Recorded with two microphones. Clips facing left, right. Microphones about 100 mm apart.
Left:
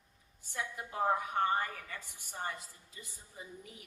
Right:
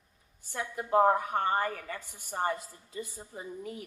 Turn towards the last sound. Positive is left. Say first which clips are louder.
# right 10 dB
turn(degrees=-50)  # may be behind; listen again after turning